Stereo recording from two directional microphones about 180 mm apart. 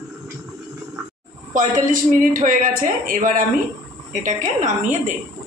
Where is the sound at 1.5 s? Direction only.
45° right (ahead or behind).